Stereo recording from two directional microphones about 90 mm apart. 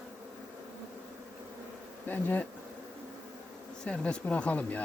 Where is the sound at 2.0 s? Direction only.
20° left (ahead or behind).